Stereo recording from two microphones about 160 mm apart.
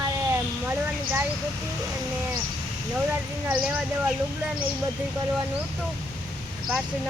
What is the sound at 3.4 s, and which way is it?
Speech, 5° right (ahead or behind).